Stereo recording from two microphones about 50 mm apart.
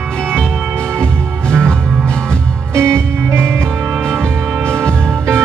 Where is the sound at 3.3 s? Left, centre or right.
Right.